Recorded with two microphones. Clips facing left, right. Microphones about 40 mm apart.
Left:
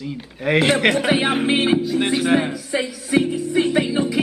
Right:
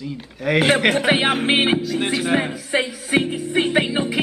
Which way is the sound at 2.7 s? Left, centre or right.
Right.